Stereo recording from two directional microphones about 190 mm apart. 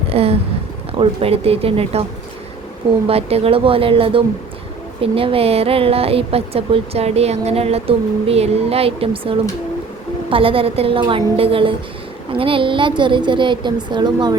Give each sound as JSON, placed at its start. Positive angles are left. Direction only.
{"t": 0.1, "sound": "a sound", "side_deg": -30}
{"t": 0.9, "sound": "speech", "side_deg": -30}
{"t": 3.1, "sound": "a woman's voice", "side_deg": -30}